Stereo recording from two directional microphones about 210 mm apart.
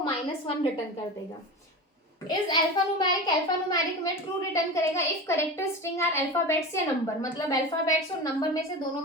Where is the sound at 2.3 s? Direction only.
20° left (ahead or behind).